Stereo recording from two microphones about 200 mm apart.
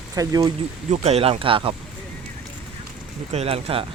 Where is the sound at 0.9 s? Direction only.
30° right (ahead or behind).